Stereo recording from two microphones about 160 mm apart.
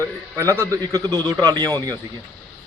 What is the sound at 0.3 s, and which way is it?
Speech, 20° right (ahead or behind).